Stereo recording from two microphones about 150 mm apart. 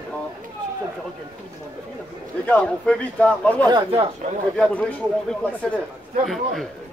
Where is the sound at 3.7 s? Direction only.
40° right (ahead or behind).